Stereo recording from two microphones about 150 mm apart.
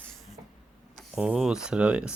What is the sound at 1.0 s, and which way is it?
Speech, 5° right (ahead or behind).